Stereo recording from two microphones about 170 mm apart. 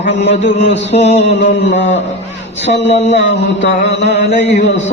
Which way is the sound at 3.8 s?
85° left.